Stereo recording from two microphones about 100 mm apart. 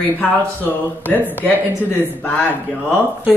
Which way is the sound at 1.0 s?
15° left (ahead or behind).